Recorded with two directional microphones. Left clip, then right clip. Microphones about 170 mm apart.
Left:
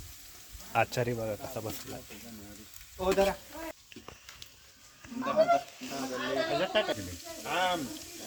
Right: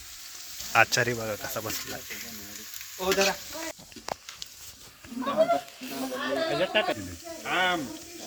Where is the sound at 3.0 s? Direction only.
25° left (ahead or behind).